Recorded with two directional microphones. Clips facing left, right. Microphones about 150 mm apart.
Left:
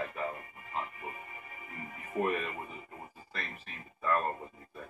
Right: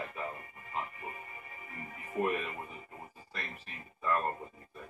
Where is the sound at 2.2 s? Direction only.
5° right (ahead or behind).